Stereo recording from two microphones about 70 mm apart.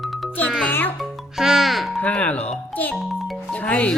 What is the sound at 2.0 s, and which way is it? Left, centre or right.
Speech, left.